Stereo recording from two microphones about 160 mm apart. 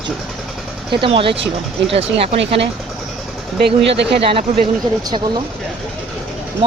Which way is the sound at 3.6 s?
90° right.